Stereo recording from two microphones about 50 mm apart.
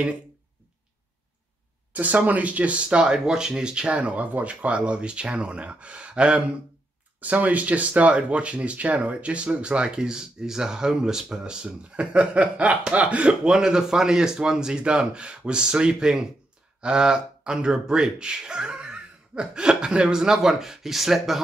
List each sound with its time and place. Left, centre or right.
1.9 s speech: right; by 21.4 s centre